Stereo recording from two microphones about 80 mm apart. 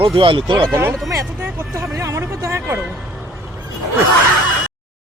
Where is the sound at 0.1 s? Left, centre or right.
Right.